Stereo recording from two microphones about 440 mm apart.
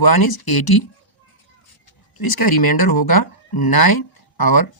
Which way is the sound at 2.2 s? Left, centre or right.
Left.